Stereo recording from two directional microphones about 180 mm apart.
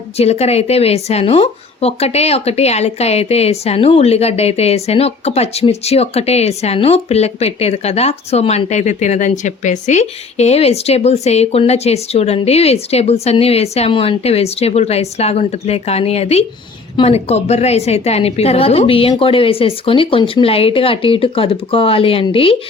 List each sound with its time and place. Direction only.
0.2 s speech: 35° left (ahead or behind)